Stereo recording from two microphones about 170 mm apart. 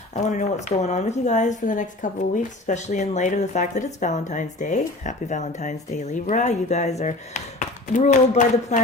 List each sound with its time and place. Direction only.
0.1 s a woman's voice: 45° left (ahead or behind)